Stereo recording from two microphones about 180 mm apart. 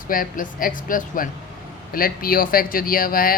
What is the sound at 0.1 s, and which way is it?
Speech, 50° left (ahead or behind).